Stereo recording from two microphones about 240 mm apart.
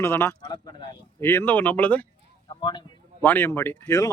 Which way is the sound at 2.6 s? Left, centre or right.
Centre.